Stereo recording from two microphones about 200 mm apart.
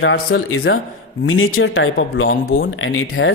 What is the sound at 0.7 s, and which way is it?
Speech, 70° left (ahead or behind).